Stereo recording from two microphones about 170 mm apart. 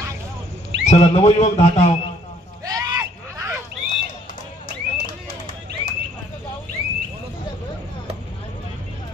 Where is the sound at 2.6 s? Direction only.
20° right (ahead or behind).